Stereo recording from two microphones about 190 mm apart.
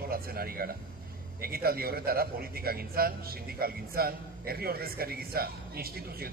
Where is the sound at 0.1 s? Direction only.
55° right (ahead or behind).